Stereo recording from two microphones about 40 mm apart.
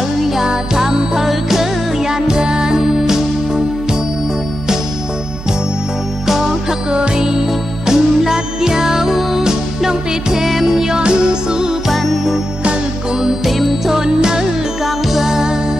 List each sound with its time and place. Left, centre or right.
0.5 s music: centre
6.2 s music: centre
6.9 s music: centre
11.0 s music: right
11.9 s music: centre
13.5 s music: centre
13.9 s music: centre